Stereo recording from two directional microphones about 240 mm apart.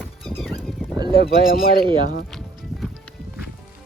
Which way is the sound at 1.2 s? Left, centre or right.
Left.